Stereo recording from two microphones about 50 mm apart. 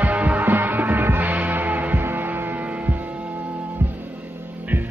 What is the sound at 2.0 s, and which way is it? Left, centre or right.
Hum, right.